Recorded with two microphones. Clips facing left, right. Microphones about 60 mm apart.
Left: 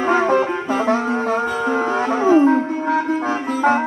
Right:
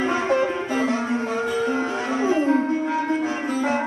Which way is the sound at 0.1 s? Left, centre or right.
Left.